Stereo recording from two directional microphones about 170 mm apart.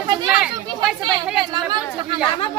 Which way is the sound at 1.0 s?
25° right (ahead or behind).